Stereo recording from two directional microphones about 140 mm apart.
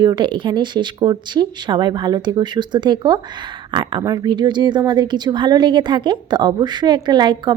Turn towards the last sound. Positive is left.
turn(degrees=-30)  # may be behind; listen again after turning